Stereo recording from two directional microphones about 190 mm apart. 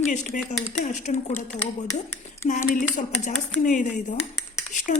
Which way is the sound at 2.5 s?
40° left (ahead or behind).